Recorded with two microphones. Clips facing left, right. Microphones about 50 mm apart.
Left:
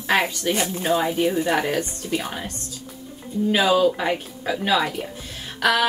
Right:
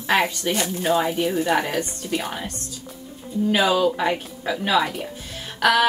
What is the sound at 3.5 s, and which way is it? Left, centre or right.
Speech, centre.